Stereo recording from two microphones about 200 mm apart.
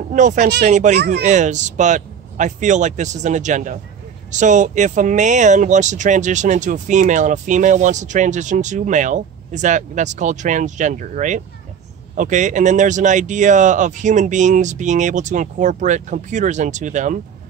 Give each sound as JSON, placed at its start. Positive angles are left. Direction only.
{"t": 0.1, "sound": "speech", "side_deg": -40}
{"t": 0.9, "sound": "speech", "side_deg": -55}
{"t": 1.2, "sound": "speech", "side_deg": -35}